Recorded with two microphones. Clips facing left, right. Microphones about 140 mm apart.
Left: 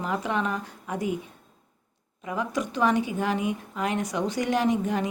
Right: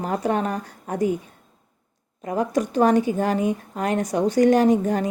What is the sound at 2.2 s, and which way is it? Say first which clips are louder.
A woman's voice: right 6 dB; 45° right (ahead or behind).